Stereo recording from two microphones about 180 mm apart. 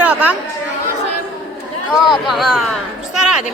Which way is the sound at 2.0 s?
Centre (ahead or behind).